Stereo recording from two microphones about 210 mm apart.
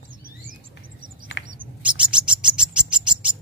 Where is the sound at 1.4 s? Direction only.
60° left (ahead or behind).